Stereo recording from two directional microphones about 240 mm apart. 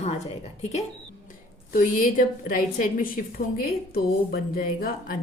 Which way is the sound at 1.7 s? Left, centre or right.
Left.